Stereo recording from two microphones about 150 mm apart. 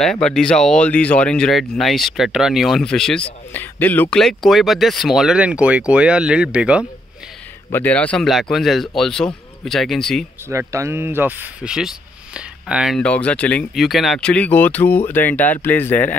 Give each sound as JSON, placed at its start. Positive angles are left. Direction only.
{"t": 0.0, "sound": "speech", "side_deg": 5}
{"t": 7.7, "sound": "speech", "side_deg": 10}
{"t": 10.5, "sound": "speech", "side_deg": -20}